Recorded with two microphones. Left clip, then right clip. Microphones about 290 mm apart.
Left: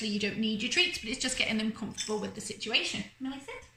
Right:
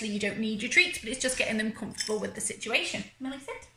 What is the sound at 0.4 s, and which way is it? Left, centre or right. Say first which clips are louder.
A woman's voice: right 4 dB; left.